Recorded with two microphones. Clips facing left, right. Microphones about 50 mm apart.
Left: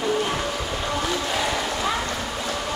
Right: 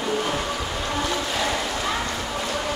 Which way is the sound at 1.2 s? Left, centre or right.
Centre.